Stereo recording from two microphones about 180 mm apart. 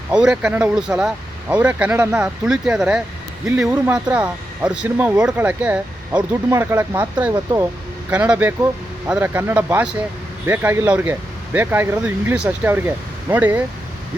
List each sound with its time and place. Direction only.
0.1 s speech: 5° right (ahead or behind)
8.1 s speech: 10° right (ahead or behind)